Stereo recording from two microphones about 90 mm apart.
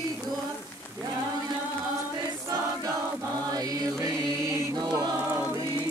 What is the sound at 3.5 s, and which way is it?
Chant, 45° right (ahead or behind).